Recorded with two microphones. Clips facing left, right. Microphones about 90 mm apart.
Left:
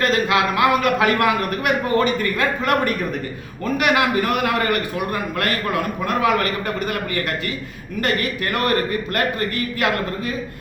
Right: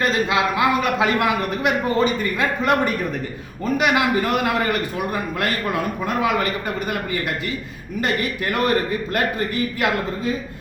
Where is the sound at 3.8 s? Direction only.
25° right (ahead or behind).